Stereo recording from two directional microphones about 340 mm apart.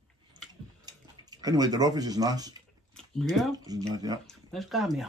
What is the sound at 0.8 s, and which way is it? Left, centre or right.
Speech, centre.